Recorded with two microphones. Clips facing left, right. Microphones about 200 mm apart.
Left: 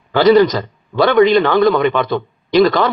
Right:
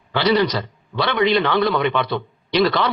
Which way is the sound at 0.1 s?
45° left (ahead or behind).